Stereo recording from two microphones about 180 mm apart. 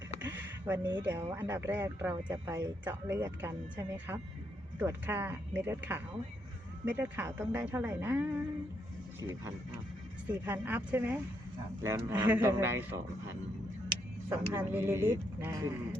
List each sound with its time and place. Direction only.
0.2 s a sound: 10° right (ahead or behind)
1.0 s speech: 15° right (ahead or behind)
14.3 s speech: 10° right (ahead or behind)